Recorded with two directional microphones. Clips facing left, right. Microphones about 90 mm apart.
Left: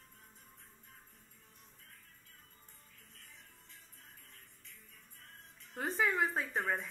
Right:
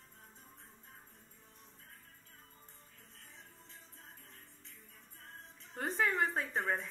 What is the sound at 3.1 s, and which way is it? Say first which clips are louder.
Music: right 3 dB; 30° right (ahead or behind).